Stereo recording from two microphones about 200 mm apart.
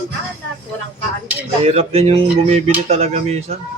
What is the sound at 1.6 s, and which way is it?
Speech, 30° right (ahead or behind).